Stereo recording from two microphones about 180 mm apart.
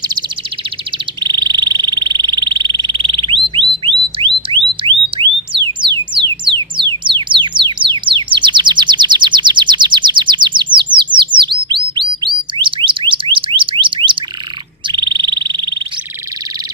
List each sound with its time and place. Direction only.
1.2 s frog: 25° right (ahead or behind)
4.5 s a sound: 30° right (ahead or behind)
5.5 s music: 25° right (ahead or behind)
11.1 s chirp: 25° right (ahead or behind)
11.9 s a sound: 25° right (ahead or behind)
14.9 s bird: 25° right (ahead or behind)